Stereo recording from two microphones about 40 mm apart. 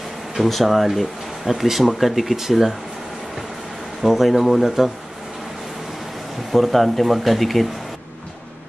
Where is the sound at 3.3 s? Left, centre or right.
Centre.